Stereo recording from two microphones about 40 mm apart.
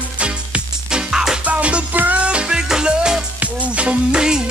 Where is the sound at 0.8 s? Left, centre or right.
Centre.